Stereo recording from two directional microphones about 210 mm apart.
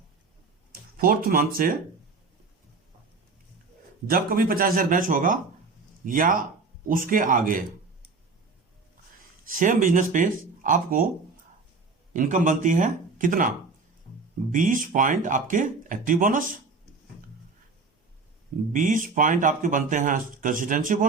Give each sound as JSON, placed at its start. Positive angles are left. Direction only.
{"t": 0.7, "sound": "speech", "side_deg": -45}
{"t": 4.1, "sound": "a man's voice", "side_deg": -45}
{"t": 9.5, "sound": "speech", "side_deg": -40}
{"t": 12.1, "sound": "speech", "side_deg": -35}
{"t": 14.5, "sound": "speech", "side_deg": -40}
{"t": 18.7, "sound": "speech", "side_deg": -40}